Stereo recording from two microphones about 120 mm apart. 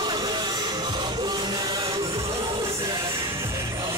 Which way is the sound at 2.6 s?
25° right (ahead or behind).